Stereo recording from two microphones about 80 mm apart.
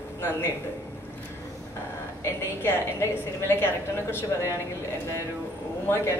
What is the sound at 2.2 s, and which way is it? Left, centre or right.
Speech, left.